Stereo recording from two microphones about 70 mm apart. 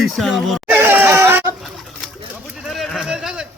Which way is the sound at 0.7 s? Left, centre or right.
Right.